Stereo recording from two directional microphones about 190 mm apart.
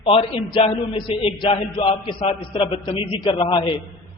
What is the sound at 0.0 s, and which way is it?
A man's voice, 30° left (ahead or behind).